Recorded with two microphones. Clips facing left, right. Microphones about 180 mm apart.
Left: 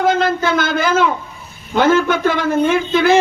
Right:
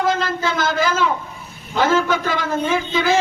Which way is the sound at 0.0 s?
60° left (ahead or behind).